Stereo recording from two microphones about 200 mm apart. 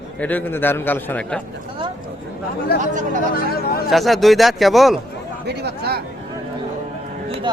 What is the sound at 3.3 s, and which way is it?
Chatter, 50° left (ahead or behind).